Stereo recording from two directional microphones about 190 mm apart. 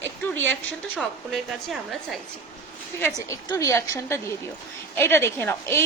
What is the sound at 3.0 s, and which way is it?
A woman's voice, 15° left (ahead or behind).